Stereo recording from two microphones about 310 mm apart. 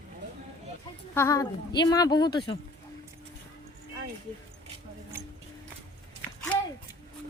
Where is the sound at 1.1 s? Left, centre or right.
Centre.